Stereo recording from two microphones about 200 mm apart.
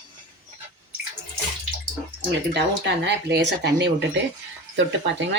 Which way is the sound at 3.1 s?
60° right (ahead or behind).